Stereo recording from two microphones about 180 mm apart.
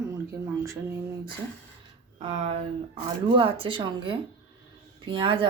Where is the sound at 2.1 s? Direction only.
30° right (ahead or behind).